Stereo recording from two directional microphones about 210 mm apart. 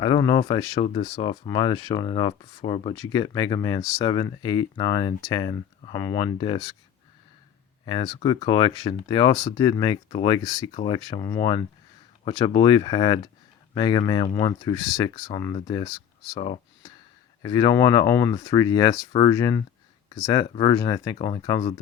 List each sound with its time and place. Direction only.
0.0 s speech: 20° left (ahead or behind)
7.9 s speech: 25° left (ahead or behind)